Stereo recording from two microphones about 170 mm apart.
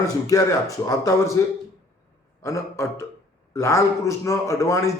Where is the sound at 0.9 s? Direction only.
20° left (ahead or behind).